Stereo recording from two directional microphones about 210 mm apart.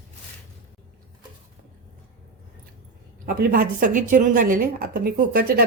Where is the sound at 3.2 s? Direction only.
45° right (ahead or behind).